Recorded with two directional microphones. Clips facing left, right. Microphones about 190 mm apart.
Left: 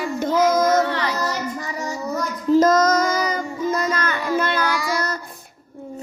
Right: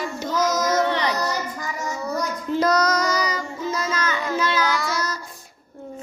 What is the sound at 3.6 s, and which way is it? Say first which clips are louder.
Music: left 3 dB; 55° left (ahead or behind).